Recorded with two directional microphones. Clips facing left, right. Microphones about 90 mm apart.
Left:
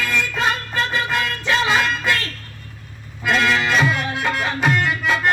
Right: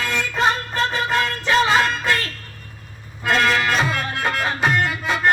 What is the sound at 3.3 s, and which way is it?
Music, 40° right (ahead or behind).